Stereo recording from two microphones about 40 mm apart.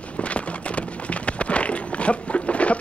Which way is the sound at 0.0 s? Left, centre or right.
Left.